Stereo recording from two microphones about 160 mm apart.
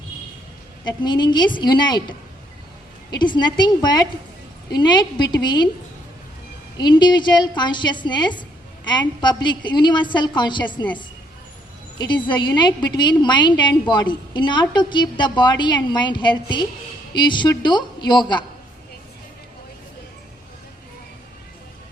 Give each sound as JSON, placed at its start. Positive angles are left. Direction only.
{"t": 0.9, "sound": "a woman's voice", "side_deg": 25}
{"t": 6.7, "sound": "a woman's voice", "side_deg": 25}
{"t": 11.9, "sound": "a woman's voice", "side_deg": 30}